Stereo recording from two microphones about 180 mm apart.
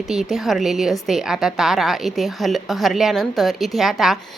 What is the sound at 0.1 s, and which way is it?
A woman's voice, centre (ahead or behind).